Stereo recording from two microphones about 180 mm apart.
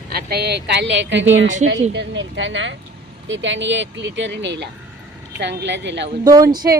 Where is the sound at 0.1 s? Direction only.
60° right (ahead or behind); by 6.1 s 75° right (ahead or behind).